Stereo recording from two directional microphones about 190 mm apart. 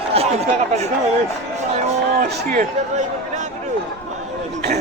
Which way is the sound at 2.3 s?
55° right (ahead or behind).